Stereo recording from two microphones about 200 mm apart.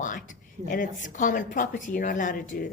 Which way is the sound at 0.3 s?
40° left (ahead or behind).